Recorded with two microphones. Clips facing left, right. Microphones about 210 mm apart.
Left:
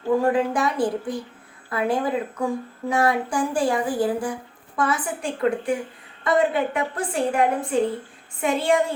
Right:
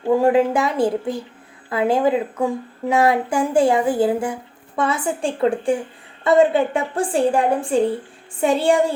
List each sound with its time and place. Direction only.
0.1 s a woman's voice: 25° right (ahead or behind)